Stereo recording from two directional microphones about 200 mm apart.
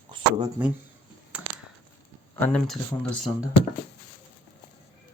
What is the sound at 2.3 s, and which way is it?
Speech, 10° left (ahead or behind).